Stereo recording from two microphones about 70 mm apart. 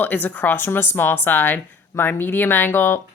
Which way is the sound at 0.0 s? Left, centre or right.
Left.